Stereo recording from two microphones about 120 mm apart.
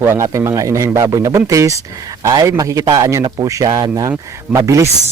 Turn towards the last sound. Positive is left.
turn(degrees=-25)  # may be behind; listen again after turning